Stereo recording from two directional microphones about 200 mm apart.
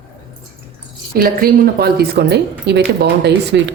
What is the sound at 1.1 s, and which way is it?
Speech, 50° right (ahead or behind).